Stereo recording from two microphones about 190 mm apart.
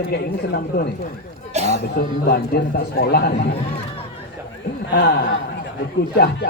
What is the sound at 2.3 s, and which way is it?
A man's voice, 55° left (ahead or behind).